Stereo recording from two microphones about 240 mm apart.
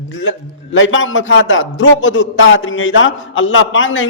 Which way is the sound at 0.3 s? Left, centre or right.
Left.